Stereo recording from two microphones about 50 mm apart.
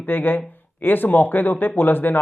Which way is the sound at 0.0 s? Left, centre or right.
Left.